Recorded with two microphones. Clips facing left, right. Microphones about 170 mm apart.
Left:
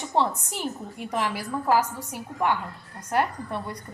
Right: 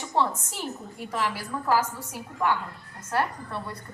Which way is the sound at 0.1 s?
20° left (ahead or behind).